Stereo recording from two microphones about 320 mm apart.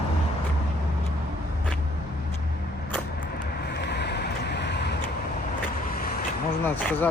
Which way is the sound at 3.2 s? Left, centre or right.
Left.